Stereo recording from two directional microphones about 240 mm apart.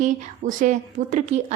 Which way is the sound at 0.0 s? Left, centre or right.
Right.